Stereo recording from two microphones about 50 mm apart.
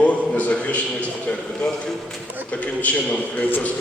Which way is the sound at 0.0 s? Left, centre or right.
Left.